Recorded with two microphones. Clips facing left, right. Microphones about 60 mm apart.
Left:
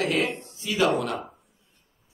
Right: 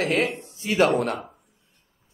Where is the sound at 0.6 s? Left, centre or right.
Right.